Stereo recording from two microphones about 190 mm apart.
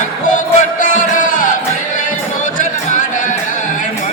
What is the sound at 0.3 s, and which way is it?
Music, 40° left (ahead or behind).